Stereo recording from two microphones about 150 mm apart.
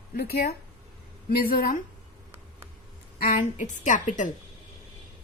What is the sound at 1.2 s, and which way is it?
Speech, 75° left (ahead or behind).